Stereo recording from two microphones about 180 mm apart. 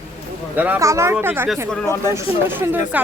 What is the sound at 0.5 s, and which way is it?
Speech, 10° right (ahead or behind).